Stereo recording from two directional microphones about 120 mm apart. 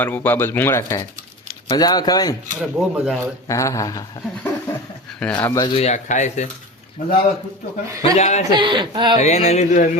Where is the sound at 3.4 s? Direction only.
25° left (ahead or behind).